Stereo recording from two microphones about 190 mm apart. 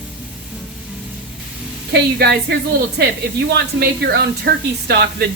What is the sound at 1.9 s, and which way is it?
A woman's voice, 60° right (ahead or behind).